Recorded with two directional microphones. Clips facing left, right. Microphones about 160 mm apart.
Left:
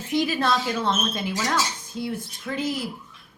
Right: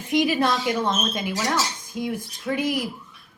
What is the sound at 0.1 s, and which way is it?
Speech, 15° right (ahead or behind).